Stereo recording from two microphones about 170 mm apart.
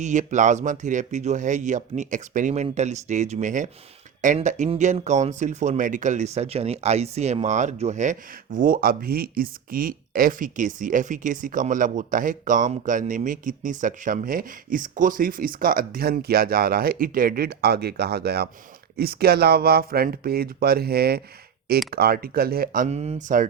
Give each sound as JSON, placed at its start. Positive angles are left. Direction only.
{"t": 0.0, "sound": "speech", "side_deg": -45}
{"t": 8.5, "sound": "speech", "side_deg": -55}